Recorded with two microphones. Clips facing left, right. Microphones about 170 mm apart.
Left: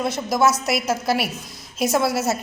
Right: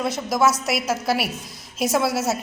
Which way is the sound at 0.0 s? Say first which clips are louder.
Left 1 dB; centre (ahead or behind).